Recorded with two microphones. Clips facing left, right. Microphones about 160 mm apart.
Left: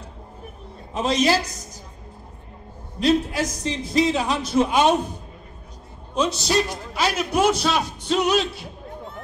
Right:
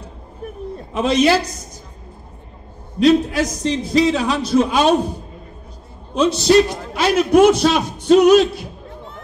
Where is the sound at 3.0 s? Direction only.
80° right.